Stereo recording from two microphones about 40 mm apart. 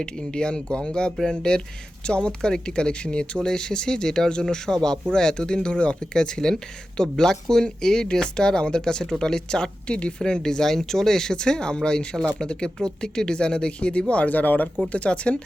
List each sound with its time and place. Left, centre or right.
0.0 s speech: left
14.1 s speech: left
14.9 s speech: left